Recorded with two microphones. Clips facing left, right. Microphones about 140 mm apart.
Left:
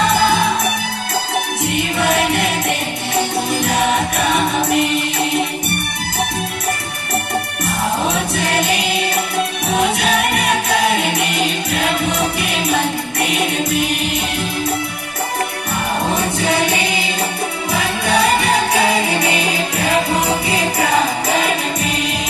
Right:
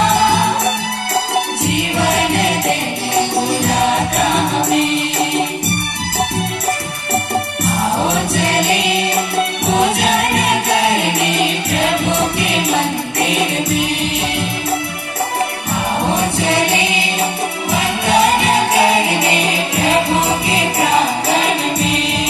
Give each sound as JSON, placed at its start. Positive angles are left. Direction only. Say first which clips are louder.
{"t": 0.1, "sound": "music", "louder": "right 1 dB", "side_deg": -25}
{"t": 1.7, "sound": "music", "louder": "even", "side_deg": -30}
{"t": 7.6, "sound": "music", "louder": "right 2 dB", "side_deg": -30}
{"t": 11.7, "sound": "music", "louder": "right 2 dB", "side_deg": -30}
{"t": 16.2, "sound": "music", "louder": "right 1 dB", "side_deg": -30}